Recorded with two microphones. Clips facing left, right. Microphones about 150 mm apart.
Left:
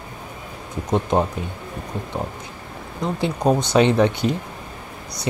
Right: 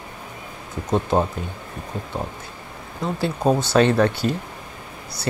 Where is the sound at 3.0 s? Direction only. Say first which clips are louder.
Left 1 dB; 20° left (ahead or behind).